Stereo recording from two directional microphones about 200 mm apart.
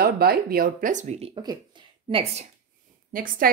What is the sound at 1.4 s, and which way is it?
Speech, 20° right (ahead or behind).